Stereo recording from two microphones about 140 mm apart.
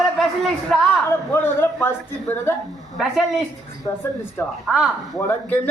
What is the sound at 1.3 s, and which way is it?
Speech, 15° left (ahead or behind).